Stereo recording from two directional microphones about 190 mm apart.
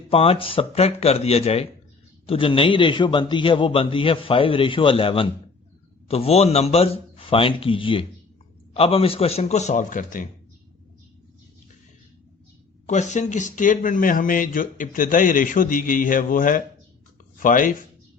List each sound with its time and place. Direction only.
0.1 s a man's voice: 30° left (ahead or behind); by 10.2 s 45° left (ahead or behind)
12.9 s speech: 40° left (ahead or behind)